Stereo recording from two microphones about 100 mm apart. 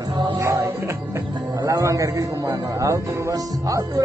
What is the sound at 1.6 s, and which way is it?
A man's voice, 35° right (ahead or behind).